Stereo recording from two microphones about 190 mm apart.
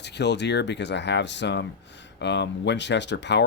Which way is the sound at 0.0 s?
65° left (ahead or behind).